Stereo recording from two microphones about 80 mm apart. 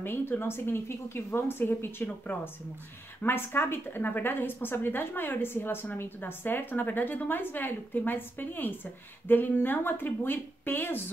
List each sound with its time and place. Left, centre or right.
0.0 s a woman's voice: left